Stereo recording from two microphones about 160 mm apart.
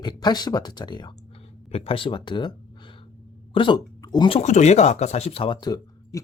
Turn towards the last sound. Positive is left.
turn(degrees=25)  # may be behind; listen again after turning